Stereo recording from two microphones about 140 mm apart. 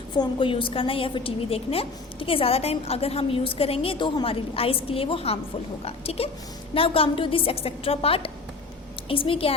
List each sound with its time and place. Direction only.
0.2 s a woman's voice: 40° left (ahead or behind)